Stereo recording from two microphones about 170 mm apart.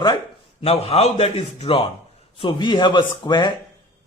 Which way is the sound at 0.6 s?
35° left (ahead or behind).